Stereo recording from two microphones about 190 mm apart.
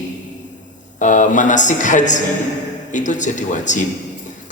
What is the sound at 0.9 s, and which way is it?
A man's voice, 40° left (ahead or behind).